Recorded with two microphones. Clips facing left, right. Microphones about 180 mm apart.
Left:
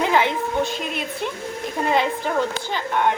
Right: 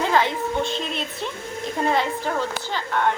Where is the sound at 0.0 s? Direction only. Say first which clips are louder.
Left 1 dB; 15° left (ahead or behind).